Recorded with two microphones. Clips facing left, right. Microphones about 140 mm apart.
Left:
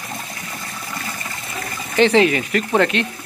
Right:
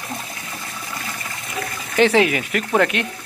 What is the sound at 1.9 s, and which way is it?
Speech, 5° right (ahead or behind).